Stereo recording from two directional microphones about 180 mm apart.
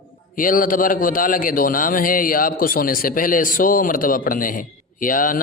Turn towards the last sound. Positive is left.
turn(degrees=50)  # may be behind; listen again after turning